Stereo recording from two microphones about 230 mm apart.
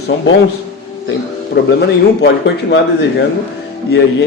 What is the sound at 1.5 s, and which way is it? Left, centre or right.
Speech, left.